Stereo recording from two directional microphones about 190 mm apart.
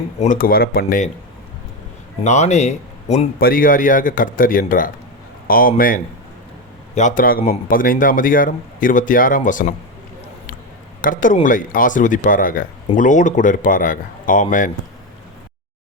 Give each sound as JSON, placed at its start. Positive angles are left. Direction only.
{"t": 0.2, "sound": "speech", "side_deg": 45}
{"t": 2.2, "sound": "speech", "side_deg": 35}
{"t": 3.4, "sound": "speech", "side_deg": 45}
{"t": 11.0, "sound": "a man's voice", "side_deg": 45}